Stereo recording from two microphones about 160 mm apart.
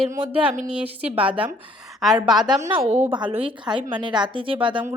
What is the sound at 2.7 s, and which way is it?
Speech, 40° right (ahead or behind).